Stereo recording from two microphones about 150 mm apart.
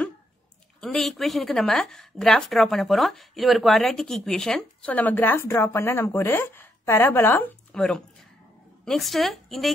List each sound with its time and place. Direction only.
0.7 s a woman's voice: centre (ahead or behind)